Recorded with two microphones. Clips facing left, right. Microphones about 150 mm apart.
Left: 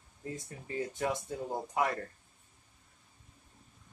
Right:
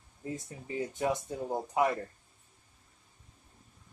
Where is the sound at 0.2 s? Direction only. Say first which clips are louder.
Right 2 dB; 20° right (ahead or behind).